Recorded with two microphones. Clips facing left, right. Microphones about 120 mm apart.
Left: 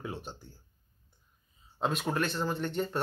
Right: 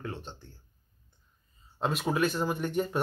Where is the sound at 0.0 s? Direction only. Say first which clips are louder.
Even; 10° left (ahead or behind).